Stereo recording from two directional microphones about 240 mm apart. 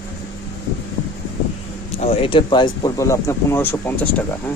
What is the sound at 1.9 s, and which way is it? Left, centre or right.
Speech, left.